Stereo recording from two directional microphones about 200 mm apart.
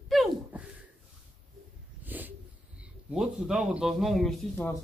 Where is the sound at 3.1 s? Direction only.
5° right (ahead or behind).